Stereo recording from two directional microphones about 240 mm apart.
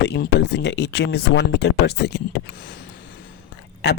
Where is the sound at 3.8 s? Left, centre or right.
Left.